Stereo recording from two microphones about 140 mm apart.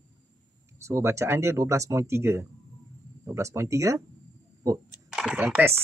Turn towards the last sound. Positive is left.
turn(degrees=-10)  # may be behind; listen again after turning